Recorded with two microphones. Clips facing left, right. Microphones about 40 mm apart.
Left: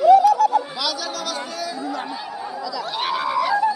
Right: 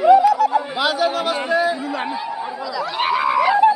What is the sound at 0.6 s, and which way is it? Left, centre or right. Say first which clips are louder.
Chatter: right 7 dB; right.